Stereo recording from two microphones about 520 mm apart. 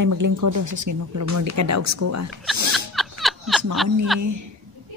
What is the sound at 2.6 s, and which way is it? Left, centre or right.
Music, right.